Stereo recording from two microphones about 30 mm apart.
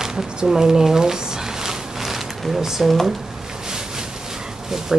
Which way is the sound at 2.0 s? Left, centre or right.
Centre.